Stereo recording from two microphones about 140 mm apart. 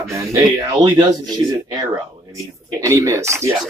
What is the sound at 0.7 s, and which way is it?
Speech, 30° right (ahead or behind).